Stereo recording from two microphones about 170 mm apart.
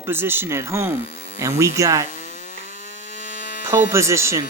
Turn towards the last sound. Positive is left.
turn(degrees=-15)  # may be behind; listen again after turning